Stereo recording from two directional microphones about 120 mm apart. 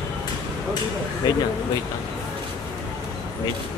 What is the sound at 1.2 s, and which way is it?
Speech, 35° left (ahead or behind).